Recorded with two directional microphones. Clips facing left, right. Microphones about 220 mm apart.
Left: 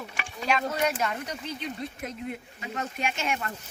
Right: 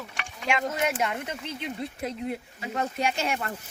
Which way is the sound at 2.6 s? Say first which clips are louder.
Right 4 dB; 35° right (ahead or behind).